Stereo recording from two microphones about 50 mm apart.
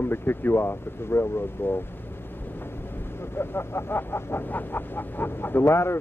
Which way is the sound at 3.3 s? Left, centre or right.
Left.